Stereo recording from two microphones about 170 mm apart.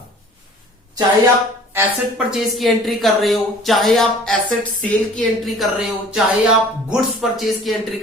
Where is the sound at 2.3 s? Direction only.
Centre (ahead or behind).